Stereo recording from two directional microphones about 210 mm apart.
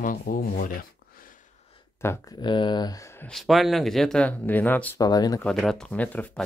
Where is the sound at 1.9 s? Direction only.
10° left (ahead or behind).